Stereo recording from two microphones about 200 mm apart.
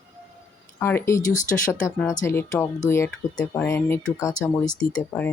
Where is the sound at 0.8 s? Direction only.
10° left (ahead or behind).